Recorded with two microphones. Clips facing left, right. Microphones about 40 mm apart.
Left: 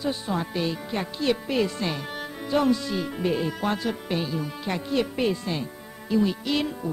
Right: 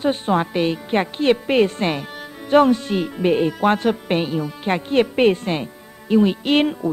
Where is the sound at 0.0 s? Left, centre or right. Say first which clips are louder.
Right 8 dB; right.